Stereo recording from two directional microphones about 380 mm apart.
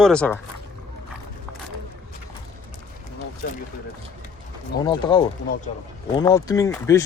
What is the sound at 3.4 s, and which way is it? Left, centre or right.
Speech, left.